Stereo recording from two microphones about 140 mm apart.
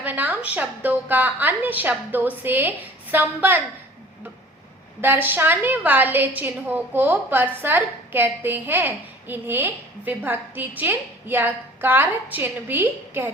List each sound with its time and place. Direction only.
0.0 s a woman's voice: 15° right (ahead or behind)
4.9 s a woman's voice: 15° right (ahead or behind)